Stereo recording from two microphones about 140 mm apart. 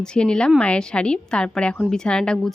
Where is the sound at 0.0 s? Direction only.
5° left (ahead or behind).